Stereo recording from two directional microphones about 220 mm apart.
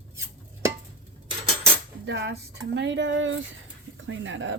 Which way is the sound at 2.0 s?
50° right (ahead or behind).